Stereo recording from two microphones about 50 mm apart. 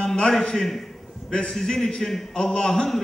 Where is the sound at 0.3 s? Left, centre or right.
Centre.